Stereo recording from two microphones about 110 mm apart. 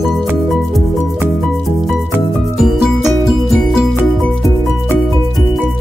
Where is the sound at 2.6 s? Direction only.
5° right (ahead or behind).